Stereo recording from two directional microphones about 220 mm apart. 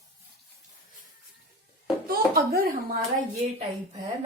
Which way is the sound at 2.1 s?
40° right (ahead or behind).